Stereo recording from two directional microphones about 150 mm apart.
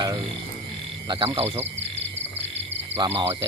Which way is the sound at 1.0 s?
40° right (ahead or behind).